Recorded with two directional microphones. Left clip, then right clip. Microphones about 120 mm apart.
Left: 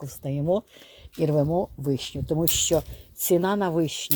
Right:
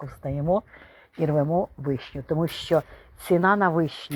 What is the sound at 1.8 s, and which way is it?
Speech, 55° left (ahead or behind).